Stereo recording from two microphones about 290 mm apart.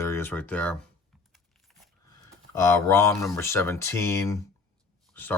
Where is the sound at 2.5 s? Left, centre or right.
Centre.